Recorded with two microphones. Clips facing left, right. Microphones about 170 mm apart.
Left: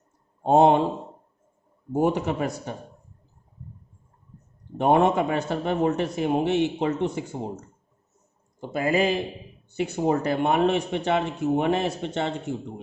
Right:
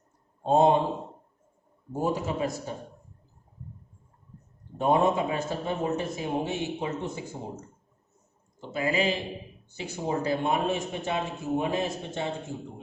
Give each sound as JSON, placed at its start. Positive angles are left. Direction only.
{"t": 0.4, "sound": "a man's voice", "side_deg": 65}
{"t": 1.9, "sound": "a man's voice", "side_deg": 75}
{"t": 4.8, "sound": "a man's voice", "side_deg": 70}
{"t": 8.7, "sound": "a man's voice", "side_deg": 50}
{"t": 9.7, "sound": "a man's voice", "side_deg": 60}